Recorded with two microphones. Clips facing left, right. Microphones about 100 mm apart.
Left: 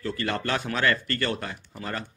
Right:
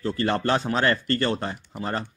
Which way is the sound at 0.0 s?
30° right (ahead or behind).